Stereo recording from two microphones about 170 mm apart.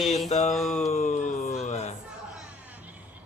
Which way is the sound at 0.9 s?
40° left (ahead or behind).